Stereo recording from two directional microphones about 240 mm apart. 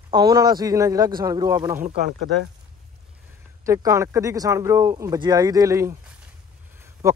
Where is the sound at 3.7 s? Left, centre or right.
Centre.